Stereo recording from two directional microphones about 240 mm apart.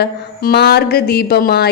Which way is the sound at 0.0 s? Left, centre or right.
Left.